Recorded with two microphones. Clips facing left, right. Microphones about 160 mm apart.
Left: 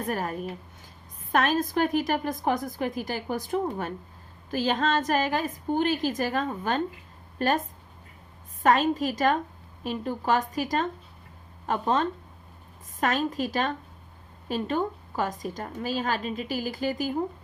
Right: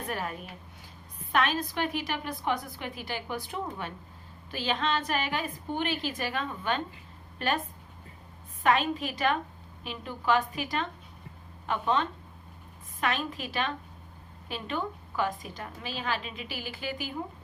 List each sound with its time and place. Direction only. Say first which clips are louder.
0.1 s a woman's voice: left 4 dB; 40° left (ahead or behind)
8.6 s a woman's voice: left 4 dB; 40° left (ahead or behind)